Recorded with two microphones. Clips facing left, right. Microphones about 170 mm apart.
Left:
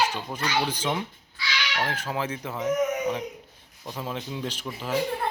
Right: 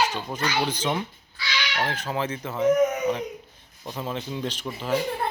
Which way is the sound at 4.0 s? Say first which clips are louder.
Right 2 dB; 5° left (ahead or behind).